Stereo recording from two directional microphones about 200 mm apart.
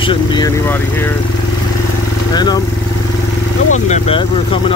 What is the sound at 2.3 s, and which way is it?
Speech, 20° left (ahead or behind).